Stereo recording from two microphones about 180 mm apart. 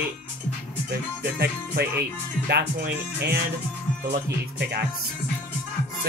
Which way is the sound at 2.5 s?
65° right (ahead or behind).